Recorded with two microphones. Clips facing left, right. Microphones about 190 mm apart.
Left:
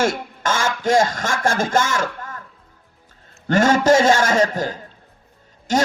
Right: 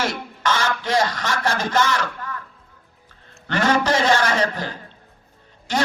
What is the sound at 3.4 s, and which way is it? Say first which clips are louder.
A man's voice: left 5 dB; 45° left (ahead or behind).